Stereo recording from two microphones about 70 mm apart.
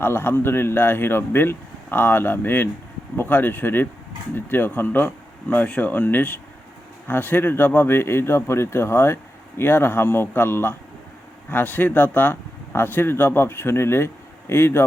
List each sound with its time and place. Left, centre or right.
0.0 s speech: left